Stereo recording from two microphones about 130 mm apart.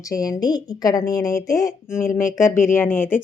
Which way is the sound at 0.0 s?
25° left (ahead or behind).